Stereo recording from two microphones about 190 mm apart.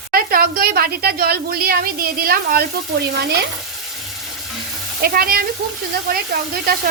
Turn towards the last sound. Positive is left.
turn(degrees=-55)  # may be behind; listen again after turning